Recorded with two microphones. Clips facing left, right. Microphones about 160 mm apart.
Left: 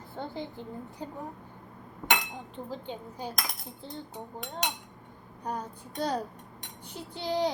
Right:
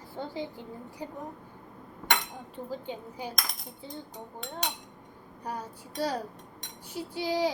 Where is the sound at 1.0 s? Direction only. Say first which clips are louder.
Right 1 dB; 15° right (ahead or behind).